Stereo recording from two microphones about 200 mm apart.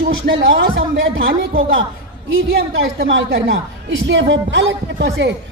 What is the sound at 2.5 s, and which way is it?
A man's voice, 60° right (ahead or behind).